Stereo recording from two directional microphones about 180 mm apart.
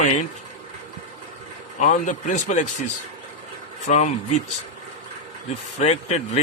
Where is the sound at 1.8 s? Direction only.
45° left (ahead or behind).